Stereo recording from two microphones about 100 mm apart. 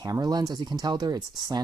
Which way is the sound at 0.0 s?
40° right (ahead or behind).